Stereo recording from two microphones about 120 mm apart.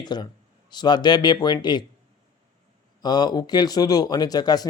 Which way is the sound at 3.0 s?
35° left (ahead or behind).